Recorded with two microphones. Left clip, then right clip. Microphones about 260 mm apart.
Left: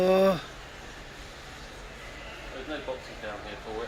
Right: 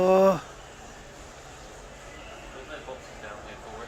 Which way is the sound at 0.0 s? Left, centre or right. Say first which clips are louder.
Right 3 dB; centre.